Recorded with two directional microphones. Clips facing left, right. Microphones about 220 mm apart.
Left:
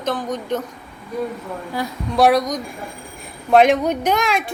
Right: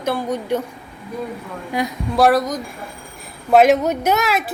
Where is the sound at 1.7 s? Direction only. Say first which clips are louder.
Right 4 dB; 20° right (ahead or behind).